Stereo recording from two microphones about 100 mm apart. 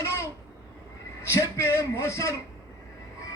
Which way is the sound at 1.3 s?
30° left (ahead or behind).